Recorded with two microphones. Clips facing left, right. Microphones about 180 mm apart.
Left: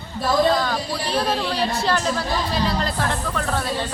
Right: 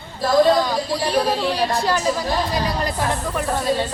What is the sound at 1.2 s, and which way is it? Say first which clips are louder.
Speech: right 2 dB; 10° right (ahead or behind).